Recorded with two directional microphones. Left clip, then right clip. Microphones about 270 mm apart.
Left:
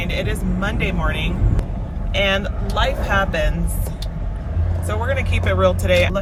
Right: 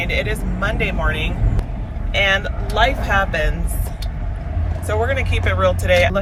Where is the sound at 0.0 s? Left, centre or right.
Centre.